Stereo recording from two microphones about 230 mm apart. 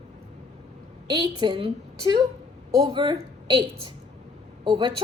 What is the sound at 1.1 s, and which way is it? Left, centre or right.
A woman's voice, centre.